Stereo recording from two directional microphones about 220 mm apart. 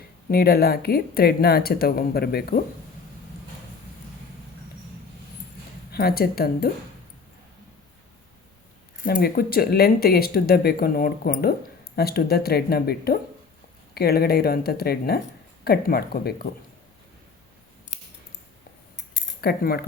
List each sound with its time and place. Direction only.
0.3 s speech: 45° left (ahead or behind)
5.9 s speech: 45° left (ahead or behind)
9.0 s speech: 45° left (ahead or behind)
19.4 s speech: 45° left (ahead or behind)